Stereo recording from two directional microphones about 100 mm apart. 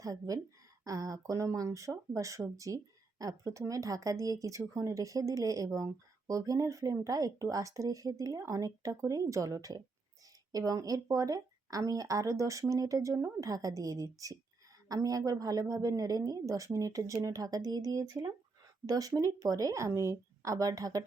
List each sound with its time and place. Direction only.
0.0 s speech: 35° right (ahead or behind)